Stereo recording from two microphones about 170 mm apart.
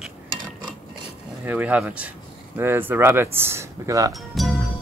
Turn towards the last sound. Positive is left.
turn(degrees=0)  # may be behind; listen again after turning